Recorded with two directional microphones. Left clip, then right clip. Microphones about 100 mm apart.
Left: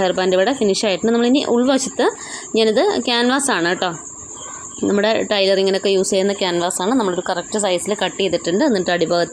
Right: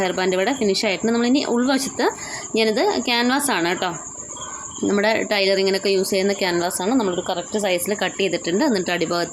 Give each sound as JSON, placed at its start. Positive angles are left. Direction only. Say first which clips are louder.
{"t": 0.0, "sound": "speech", "louder": "left 4 dB", "side_deg": 35}
{"t": 6.7, "sound": "speech", "louder": "left 3 dB", "side_deg": 40}
{"t": 7.6, "sound": "speech", "louder": "left 2 dB", "side_deg": 25}